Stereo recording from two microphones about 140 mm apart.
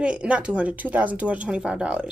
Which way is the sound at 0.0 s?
10° right (ahead or behind).